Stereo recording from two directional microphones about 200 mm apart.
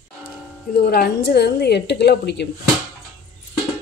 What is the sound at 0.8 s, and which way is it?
Speech, 50° left (ahead or behind).